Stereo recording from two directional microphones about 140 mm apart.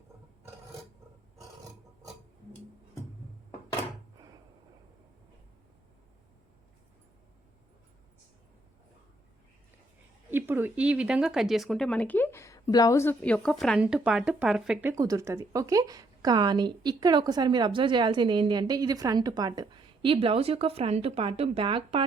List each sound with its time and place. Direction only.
10.3 s speech: 15° right (ahead or behind); by 13.1 s 20° left (ahead or behind)
13.2 s speech: 5° left (ahead or behind)
13.7 s speech: 10° right (ahead or behind)
14.9 s a woman's voice: 25° right (ahead or behind)